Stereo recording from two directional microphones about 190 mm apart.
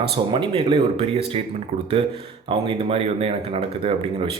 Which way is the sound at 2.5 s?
25° right (ahead or behind).